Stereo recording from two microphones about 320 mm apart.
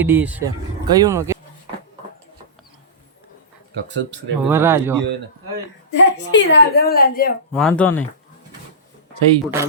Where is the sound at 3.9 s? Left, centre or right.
Right.